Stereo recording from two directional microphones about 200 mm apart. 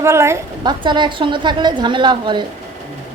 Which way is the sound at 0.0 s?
15° right (ahead or behind).